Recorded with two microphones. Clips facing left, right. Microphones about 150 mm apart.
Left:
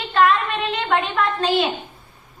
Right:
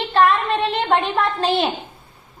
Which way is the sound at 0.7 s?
30° right (ahead or behind).